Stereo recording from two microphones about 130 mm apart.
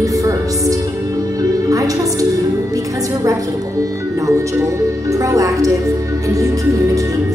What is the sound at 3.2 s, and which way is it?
Speech, 25° right (ahead or behind).